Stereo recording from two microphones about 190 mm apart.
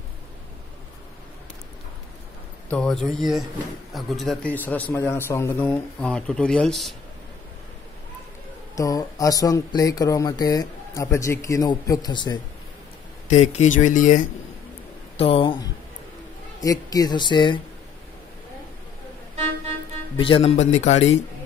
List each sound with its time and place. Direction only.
2.7 s a man's voice: 5° left (ahead or behind)
8.7 s speech: 15° left (ahead or behind)
13.3 s speech: 35° left (ahead or behind)
15.1 s speech: 30° left (ahead or behind)
20.2 s speech: 30° left (ahead or behind)